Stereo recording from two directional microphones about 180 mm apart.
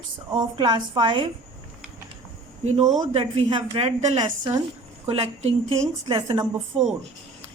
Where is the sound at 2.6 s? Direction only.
35° right (ahead or behind).